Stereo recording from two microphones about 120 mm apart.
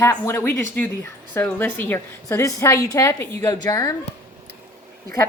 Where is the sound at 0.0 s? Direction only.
20° left (ahead or behind).